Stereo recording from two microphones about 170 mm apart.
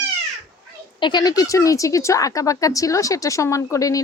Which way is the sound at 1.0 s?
25° left (ahead or behind).